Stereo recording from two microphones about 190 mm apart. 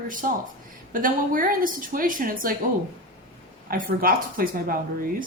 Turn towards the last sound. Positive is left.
turn(degrees=-50)  # may be behind; listen again after turning